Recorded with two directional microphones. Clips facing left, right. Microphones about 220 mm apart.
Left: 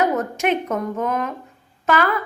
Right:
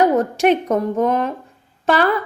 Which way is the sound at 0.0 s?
35° right (ahead or behind).